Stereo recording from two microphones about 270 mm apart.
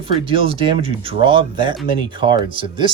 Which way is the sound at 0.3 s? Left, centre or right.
Centre.